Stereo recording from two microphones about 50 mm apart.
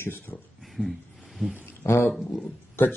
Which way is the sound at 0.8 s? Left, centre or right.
Centre.